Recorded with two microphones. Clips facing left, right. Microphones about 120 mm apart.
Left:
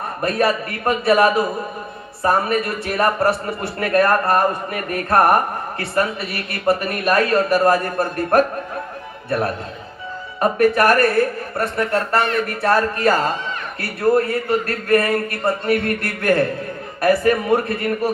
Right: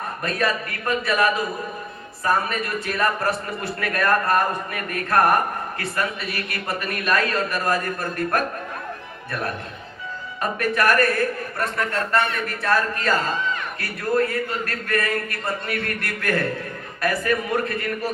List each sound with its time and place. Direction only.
0.2 s a man's voice: 30° left (ahead or behind)
10.4 s a man's voice: 30° left (ahead or behind)